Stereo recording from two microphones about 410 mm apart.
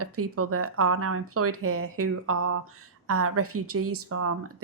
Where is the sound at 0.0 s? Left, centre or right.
Right.